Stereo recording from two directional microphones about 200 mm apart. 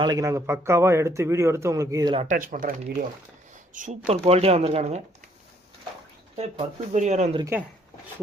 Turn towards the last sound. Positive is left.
turn(degrees=-15)  # may be behind; listen again after turning